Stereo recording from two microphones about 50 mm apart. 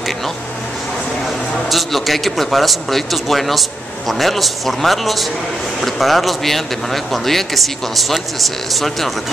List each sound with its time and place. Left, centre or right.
1.7 s a man's voice: centre